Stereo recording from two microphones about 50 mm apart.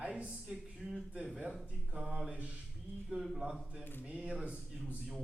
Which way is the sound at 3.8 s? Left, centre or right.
Left.